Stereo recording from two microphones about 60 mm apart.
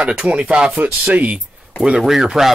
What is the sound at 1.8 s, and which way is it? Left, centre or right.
Speech, centre.